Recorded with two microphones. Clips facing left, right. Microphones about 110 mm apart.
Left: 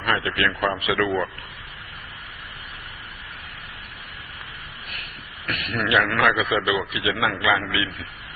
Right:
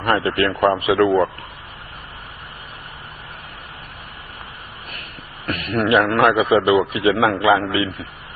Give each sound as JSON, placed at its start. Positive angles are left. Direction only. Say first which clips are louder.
{"t": 0.0, "sound": "a man's voice", "louder": "right 6 dB", "side_deg": -30}
{"t": 0.4, "sound": "a man's voice", "louder": "right 6 dB", "side_deg": -50}
{"t": 0.7, "sound": "a man's voice", "louder": "right 7 dB", "side_deg": -35}
{"t": 5.5, "sound": "a man's voice", "louder": "right 6 dB", "side_deg": -35}